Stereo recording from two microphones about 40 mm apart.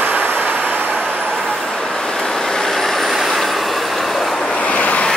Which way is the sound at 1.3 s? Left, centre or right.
Centre.